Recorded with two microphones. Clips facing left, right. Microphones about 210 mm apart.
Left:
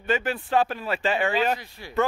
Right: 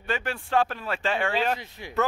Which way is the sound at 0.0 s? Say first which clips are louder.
Left 4 dB; centre (ahead or behind).